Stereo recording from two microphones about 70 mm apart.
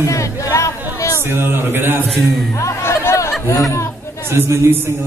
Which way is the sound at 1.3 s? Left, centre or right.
Right.